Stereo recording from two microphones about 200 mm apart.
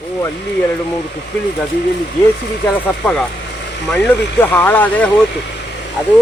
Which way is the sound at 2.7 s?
10° left (ahead or behind).